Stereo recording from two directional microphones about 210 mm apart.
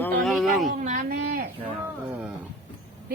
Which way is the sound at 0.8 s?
40° right (ahead or behind).